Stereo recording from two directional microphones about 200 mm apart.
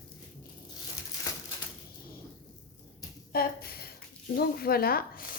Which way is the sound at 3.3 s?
50° left (ahead or behind).